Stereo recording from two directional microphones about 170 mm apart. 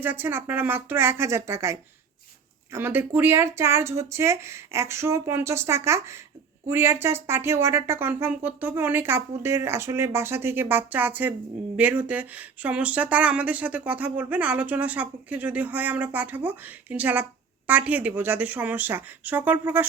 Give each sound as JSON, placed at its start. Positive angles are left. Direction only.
{"t": 0.0, "sound": "speech", "side_deg": -10}